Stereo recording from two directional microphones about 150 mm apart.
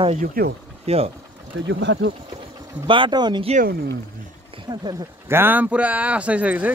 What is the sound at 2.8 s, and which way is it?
Speech, 35° right (ahead or behind).